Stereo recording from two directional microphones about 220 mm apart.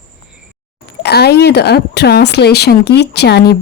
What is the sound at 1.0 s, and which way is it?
Speech, 45° left (ahead or behind).